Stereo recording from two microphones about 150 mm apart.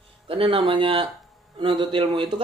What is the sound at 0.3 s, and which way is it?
Speech, 40° right (ahead or behind).